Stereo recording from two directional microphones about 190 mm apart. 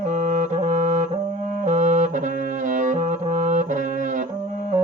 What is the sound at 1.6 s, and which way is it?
Brass instrument, 40° right (ahead or behind).